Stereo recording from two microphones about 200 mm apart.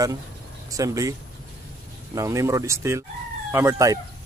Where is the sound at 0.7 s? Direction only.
15° right (ahead or behind).